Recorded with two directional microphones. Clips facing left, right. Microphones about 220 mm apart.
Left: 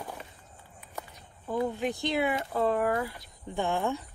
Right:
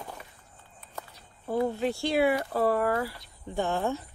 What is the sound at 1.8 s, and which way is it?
Speech, 15° left (ahead or behind).